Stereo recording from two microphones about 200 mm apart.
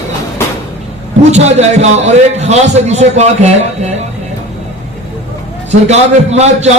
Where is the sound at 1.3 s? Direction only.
35° right (ahead or behind).